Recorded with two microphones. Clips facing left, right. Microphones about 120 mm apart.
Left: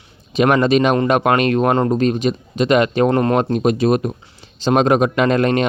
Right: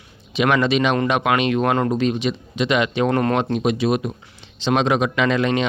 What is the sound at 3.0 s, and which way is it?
Speech, 30° left (ahead or behind).